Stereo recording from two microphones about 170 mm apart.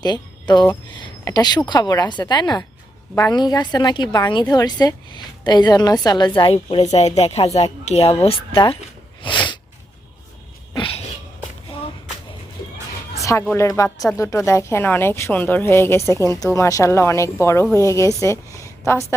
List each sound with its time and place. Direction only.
0.0 s a woman's voice: 25° left (ahead or behind)
9.2 s sneeze: 30° left (ahead or behind)
10.8 s a sound: 30° left (ahead or behind)
13.6 s a woman's voice: 15° left (ahead or behind)